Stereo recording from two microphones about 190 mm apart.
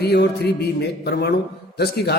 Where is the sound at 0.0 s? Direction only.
60° left (ahead or behind).